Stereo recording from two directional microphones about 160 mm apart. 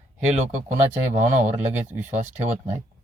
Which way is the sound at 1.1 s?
50° right (ahead or behind).